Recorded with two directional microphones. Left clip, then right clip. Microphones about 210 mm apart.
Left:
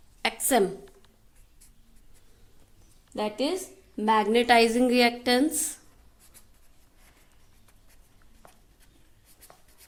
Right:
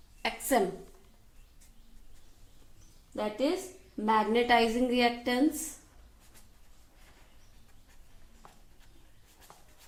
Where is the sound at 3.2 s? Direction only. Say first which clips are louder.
Left 2 dB; 50° left (ahead or behind).